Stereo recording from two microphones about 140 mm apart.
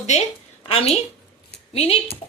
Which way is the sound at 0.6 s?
40° left (ahead or behind).